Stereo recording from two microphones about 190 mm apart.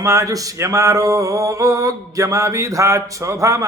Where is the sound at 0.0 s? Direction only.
15° right (ahead or behind).